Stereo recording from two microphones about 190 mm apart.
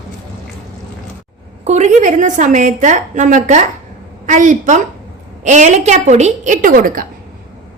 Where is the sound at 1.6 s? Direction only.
35° right (ahead or behind).